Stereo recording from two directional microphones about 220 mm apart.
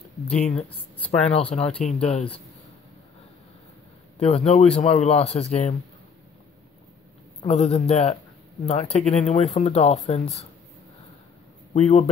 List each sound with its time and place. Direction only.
0.5 s speech: 5° left (ahead or behind)
1.4 s a man's voice: 25° left (ahead or behind)
4.2 s a man's voice: 30° left (ahead or behind)
7.4 s a man's voice: 30° left (ahead or behind)
11.7 s a man's voice: 30° left (ahead or behind)